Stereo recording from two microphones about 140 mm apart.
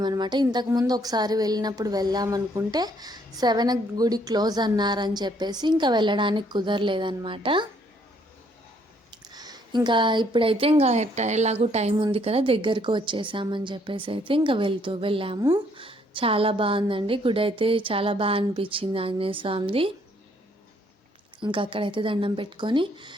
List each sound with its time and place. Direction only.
0.0 s a woman's voice: 30° right (ahead or behind)
9.2 s a woman's voice: 30° right (ahead or behind)
15.4 s a woman's voice: 30° right (ahead or behind)
21.4 s a woman's voice: 35° right (ahead or behind)